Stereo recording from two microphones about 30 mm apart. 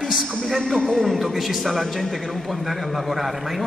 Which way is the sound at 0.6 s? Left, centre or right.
Centre.